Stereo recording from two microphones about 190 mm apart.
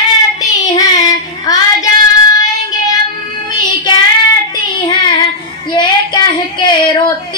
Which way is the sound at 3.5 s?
25° left (ahead or behind).